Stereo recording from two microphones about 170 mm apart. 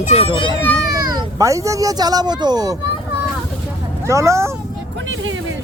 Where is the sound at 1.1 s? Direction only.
20° right (ahead or behind).